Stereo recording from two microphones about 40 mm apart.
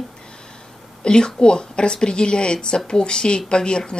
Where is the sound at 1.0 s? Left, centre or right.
Left.